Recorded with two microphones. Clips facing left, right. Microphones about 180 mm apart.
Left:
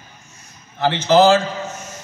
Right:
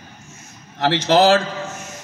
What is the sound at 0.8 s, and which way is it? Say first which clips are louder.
Speech: left 1 dB; 75° right (ahead or behind).